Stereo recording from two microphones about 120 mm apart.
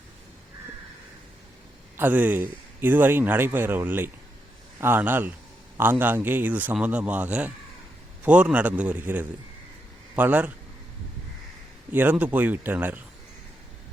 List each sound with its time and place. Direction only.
2.0 s speech: 15° right (ahead or behind)
11.9 s speech: 15° right (ahead or behind)